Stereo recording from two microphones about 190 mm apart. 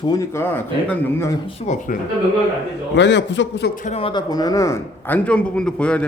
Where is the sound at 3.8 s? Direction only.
35° left (ahead or behind); by 6.0 s 5° left (ahead or behind).